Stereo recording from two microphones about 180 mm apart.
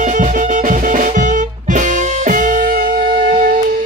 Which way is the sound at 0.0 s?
45° right (ahead or behind).